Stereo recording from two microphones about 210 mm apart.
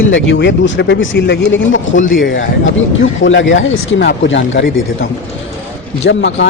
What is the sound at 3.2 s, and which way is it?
Speech, 65° left (ahead or behind).